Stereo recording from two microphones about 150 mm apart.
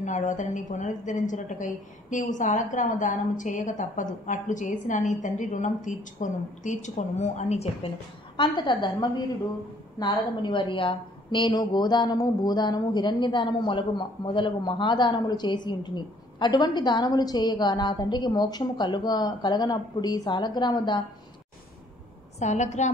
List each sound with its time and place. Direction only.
0.0 s a woman's voice: 55° left (ahead or behind)
8.4 s a woman's voice: 30° left (ahead or behind)
22.4 s a woman's voice: 50° left (ahead or behind)